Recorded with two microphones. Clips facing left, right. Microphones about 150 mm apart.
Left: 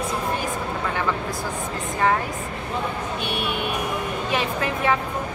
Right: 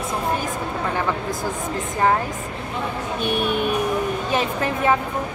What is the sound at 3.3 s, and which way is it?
Speech, 45° right (ahead or behind).